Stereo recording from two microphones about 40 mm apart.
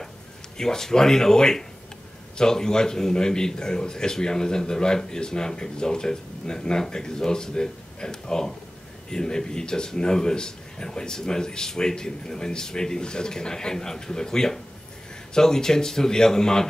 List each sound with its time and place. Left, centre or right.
0.6 s a man's voice: centre